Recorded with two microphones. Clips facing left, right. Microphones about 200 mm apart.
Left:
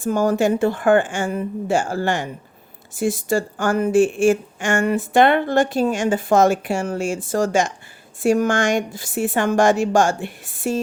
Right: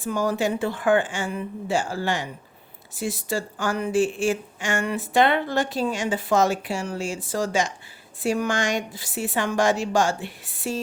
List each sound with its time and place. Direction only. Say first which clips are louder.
0.0 s speech: left 6 dB; 50° left (ahead or behind)